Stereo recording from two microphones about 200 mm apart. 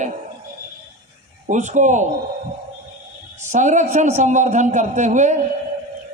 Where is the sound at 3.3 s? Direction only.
35° right (ahead or behind).